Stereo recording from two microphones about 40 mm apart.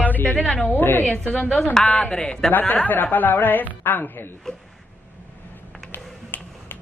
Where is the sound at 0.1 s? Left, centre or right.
Left.